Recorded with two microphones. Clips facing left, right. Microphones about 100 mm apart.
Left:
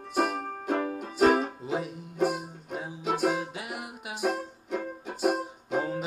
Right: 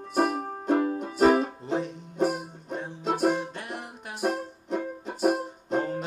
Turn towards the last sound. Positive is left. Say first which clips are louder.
# right 2 dB
turn(degrees=5)  # may be behind; listen again after turning